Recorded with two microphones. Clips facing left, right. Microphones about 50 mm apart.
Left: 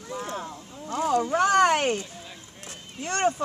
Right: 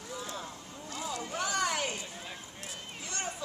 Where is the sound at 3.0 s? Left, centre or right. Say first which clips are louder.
Left 15 dB; left.